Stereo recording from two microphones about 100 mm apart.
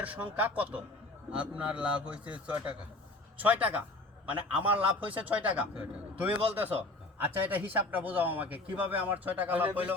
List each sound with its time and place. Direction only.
0.0 s a man's voice: 15° right (ahead or behind)